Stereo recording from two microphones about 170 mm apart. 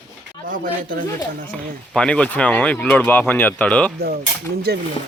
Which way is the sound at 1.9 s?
5° left (ahead or behind).